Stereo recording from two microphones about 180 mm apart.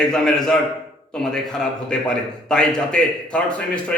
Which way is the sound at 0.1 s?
5° left (ahead or behind).